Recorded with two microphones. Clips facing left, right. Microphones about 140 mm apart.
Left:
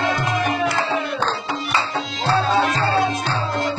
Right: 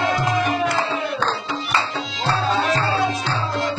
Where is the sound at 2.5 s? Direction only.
55° left (ahead or behind).